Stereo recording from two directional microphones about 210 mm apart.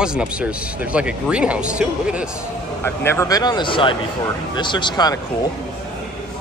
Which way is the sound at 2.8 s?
10° left (ahead or behind).